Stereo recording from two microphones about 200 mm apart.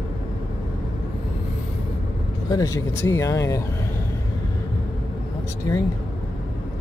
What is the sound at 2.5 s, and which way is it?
Speech, 15° left (ahead or behind).